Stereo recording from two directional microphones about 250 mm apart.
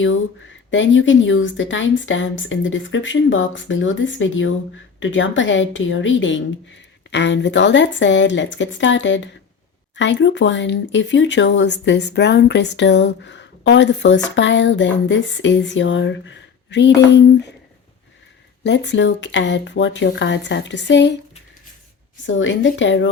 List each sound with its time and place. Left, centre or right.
0.7 s speech: left
18.6 s speech: left
22.3 s speech: left